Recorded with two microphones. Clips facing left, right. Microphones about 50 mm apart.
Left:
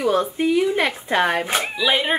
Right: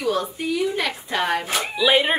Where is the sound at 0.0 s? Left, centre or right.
Left.